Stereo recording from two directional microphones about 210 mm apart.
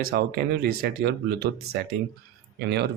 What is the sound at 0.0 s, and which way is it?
Speech, 45° right (ahead or behind).